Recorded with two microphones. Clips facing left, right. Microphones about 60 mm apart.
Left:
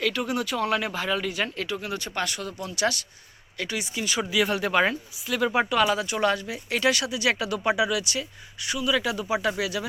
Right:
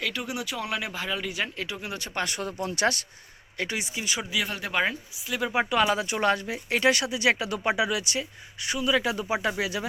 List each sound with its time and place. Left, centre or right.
0.0 s speech: centre; by 3.8 s right
3.9 s speech: centre
4.2 s speech: centre
5.5 s speech: centre